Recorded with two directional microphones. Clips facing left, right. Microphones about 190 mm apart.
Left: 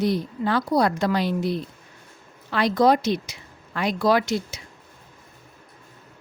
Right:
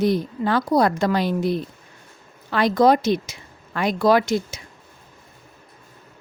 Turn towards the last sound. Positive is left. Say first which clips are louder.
# right 3 dB
turn(degrees=-50)  # may be behind; listen again after turning